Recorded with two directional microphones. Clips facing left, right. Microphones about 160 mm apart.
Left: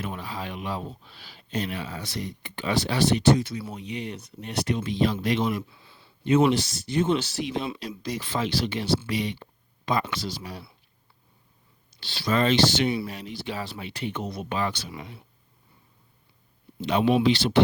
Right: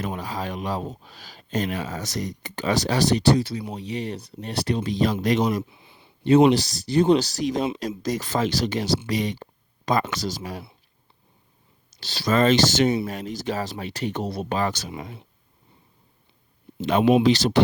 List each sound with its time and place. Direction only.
0.0 s speech: 40° right (ahead or behind)
5.6 s a sound: 20° right (ahead or behind)
6.2 s speech: 35° right (ahead or behind)
11.9 s speech: 40° right (ahead or behind)
17.2 s speech: 40° right (ahead or behind)